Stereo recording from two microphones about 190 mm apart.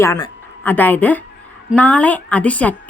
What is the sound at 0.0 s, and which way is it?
A woman's voice, 15° left (ahead or behind).